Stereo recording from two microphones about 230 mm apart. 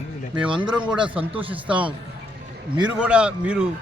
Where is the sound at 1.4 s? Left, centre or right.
Centre.